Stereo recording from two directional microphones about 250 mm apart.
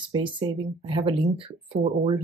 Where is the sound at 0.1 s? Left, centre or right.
Centre.